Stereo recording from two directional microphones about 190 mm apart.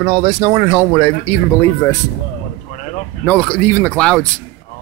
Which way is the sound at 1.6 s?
15° left (ahead or behind).